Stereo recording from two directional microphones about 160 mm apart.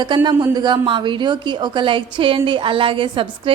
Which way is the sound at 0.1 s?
30° right (ahead or behind).